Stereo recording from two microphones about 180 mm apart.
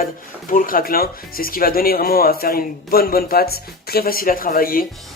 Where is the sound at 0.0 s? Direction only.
50° left (ahead or behind).